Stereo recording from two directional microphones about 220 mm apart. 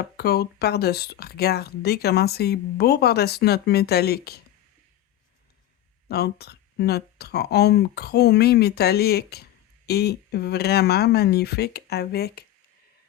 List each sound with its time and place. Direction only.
0.2 s speech: 45° left (ahead or behind)
6.1 s speech: 45° left (ahead or behind)